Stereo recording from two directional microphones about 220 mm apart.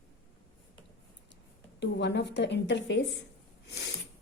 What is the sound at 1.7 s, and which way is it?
A woman's voice, 50° left (ahead or behind).